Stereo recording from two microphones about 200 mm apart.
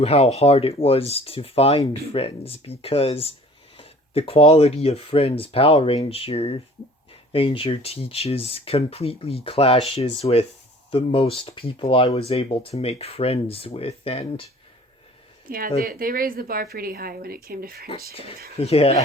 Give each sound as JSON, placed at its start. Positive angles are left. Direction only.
{"t": 0.0, "sound": "speech", "side_deg": 30}
{"t": 15.4, "sound": "speech", "side_deg": -45}
{"t": 18.1, "sound": "speech", "side_deg": 30}